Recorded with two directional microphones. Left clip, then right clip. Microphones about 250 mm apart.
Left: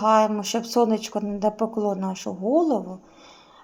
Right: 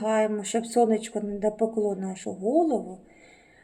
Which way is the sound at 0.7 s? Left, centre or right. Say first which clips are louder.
Left 1 dB; centre.